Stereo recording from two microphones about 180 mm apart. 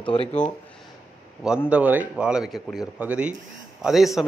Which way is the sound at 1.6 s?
10° right (ahead or behind).